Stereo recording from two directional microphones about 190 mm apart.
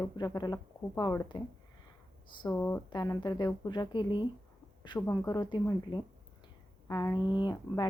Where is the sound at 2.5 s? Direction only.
10° left (ahead or behind).